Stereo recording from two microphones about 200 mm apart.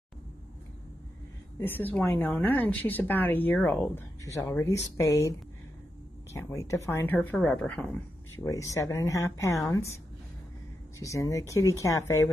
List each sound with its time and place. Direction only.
1.6 s speech: 10° left (ahead or behind)
6.3 s speech: 15° left (ahead or behind)
11.0 s speech: 15° left (ahead or behind)